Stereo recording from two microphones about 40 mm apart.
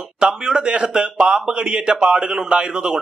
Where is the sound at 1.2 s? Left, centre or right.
Centre.